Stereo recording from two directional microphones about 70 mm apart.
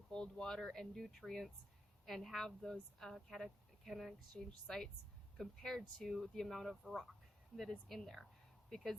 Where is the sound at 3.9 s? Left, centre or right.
Centre.